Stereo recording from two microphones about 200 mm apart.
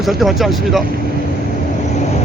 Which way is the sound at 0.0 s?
Centre (ahead or behind).